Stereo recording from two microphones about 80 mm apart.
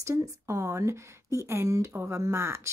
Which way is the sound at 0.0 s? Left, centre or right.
Right.